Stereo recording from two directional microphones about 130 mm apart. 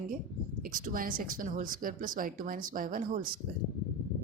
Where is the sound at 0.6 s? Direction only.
90° right.